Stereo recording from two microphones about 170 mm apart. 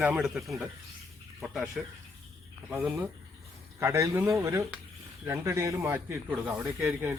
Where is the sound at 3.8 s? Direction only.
15° right (ahead or behind).